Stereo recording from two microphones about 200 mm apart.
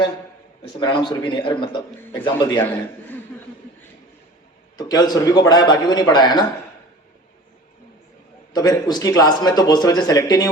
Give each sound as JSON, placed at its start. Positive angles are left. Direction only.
{"t": 0.8, "sound": "a man's voice", "side_deg": 25}
{"t": 4.8, "sound": "a man's voice", "side_deg": 20}
{"t": 8.5, "sound": "a man's voice", "side_deg": 20}